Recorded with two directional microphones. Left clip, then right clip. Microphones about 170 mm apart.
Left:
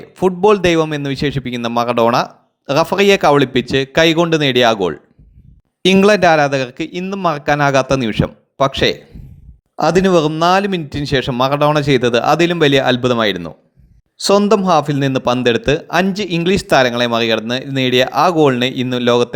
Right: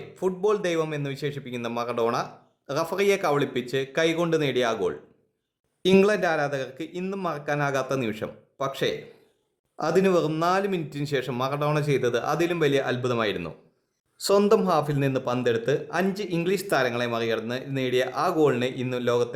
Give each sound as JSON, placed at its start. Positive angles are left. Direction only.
{"t": 0.1, "sound": "a man's voice", "side_deg": 40}